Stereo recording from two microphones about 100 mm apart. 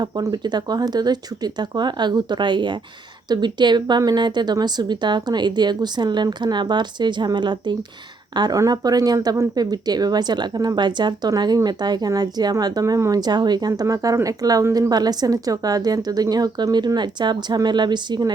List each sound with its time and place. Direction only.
0.0 s speech: 45° right (ahead or behind)
8.4 s speech: 40° right (ahead or behind)